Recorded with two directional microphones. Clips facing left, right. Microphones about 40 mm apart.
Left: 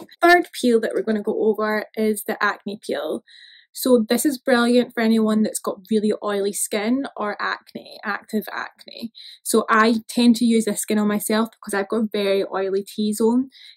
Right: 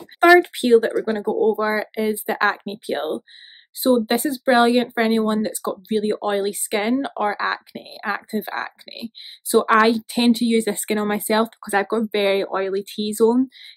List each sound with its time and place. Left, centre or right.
0.4 s speech: right
7.3 s speech: centre; by 13.3 s right